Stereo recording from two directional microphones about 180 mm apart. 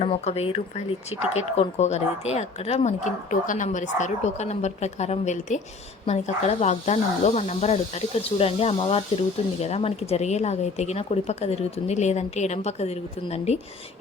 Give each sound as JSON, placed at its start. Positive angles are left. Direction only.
{"t": 0.0, "sound": "speech", "side_deg": 35}